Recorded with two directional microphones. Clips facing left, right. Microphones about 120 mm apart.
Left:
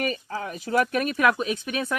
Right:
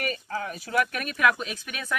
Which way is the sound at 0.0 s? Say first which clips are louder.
Left 2 dB; 25° left (ahead or behind).